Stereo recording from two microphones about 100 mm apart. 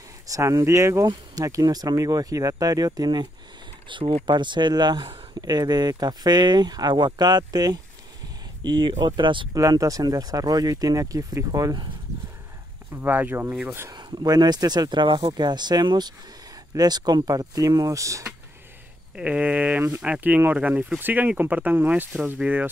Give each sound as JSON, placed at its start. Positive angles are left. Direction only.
{"t": 0.3, "sound": "speech", "side_deg": -35}
{"t": 4.3, "sound": "speech", "side_deg": -50}
{"t": 9.5, "sound": "speech", "side_deg": -35}
{"t": 12.9, "sound": "speech", "side_deg": -20}
{"t": 13.9, "sound": "speech", "side_deg": -45}
{"t": 19.1, "sound": "speech", "side_deg": -15}